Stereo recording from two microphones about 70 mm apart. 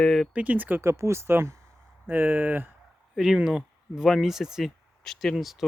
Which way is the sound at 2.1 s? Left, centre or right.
Right.